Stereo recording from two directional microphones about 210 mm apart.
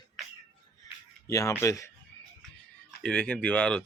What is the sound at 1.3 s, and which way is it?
Speech, 15° left (ahead or behind).